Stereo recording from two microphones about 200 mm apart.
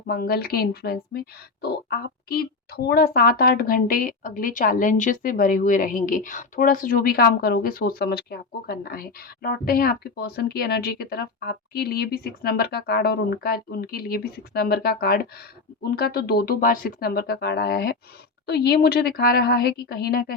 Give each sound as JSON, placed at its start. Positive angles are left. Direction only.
{"t": 0.1, "sound": "speech", "side_deg": 50}